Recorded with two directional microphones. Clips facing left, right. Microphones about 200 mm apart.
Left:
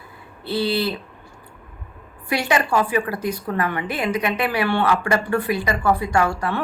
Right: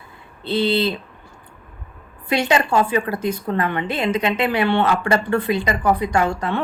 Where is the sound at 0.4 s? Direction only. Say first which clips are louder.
Right 3 dB; 20° right (ahead or behind).